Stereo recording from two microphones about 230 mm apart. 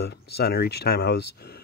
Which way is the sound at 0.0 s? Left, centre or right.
Left.